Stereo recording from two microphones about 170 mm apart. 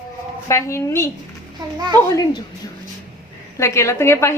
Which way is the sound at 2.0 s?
20° left (ahead or behind).